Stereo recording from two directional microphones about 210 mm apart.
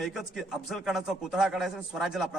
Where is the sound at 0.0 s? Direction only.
Centre (ahead or behind).